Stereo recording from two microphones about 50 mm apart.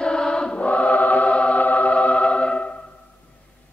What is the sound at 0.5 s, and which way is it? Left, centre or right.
Music, left.